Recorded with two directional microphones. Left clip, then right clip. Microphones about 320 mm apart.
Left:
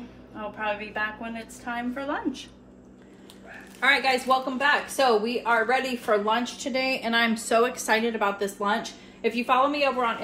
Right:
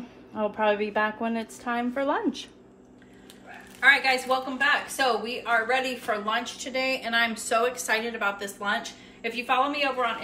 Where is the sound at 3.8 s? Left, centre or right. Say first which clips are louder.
Right 1 dB; centre.